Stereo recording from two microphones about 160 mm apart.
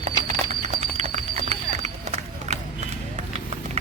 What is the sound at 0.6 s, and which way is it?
Horse, 45° right (ahead or behind).